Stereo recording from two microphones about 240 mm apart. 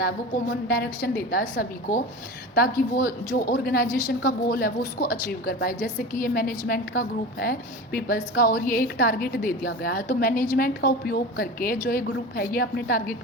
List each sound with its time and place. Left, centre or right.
0.7 s a woman's voice: left